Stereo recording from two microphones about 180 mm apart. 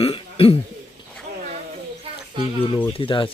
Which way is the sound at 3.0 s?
30° left (ahead or behind).